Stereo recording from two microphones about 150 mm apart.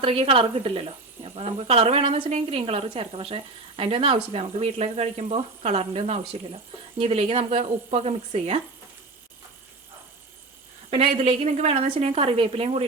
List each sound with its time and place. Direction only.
0.0 s speech: 40° right (ahead or behind)
10.9 s speech: 40° right (ahead or behind)